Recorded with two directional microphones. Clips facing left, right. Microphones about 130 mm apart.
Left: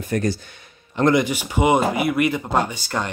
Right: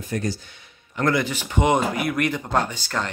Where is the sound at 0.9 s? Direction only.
20° left (ahead or behind).